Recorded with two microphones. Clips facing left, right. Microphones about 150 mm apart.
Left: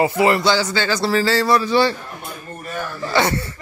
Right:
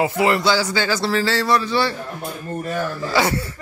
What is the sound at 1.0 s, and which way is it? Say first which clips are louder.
Speech: left 2 dB; centre (ahead or behind).